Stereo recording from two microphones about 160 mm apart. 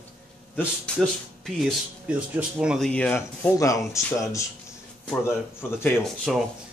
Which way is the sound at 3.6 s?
20° left (ahead or behind).